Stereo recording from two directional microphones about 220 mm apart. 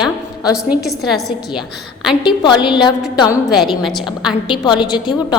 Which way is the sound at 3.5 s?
Centre (ahead or behind).